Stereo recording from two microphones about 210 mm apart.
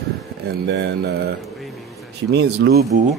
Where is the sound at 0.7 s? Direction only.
55° right (ahead or behind).